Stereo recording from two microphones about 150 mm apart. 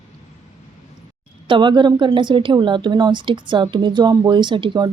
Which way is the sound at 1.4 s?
30° right (ahead or behind).